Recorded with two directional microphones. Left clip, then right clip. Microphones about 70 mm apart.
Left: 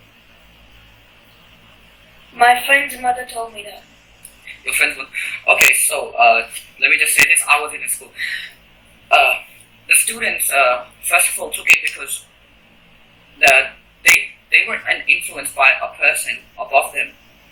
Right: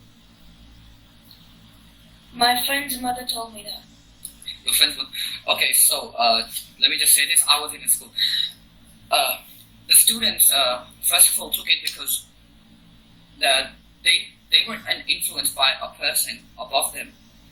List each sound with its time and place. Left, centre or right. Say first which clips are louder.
2.3 s speech: left 8 dB; right
13.4 s hiccup: left 9 dB; right
14.5 s speech: left 5 dB; right